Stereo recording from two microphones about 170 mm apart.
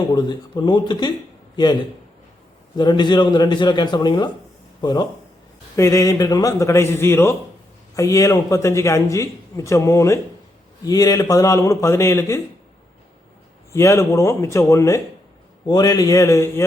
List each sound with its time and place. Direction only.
0.1 s a man's voice: 25° left (ahead or behind)
13.7 s a man's voice: 15° left (ahead or behind)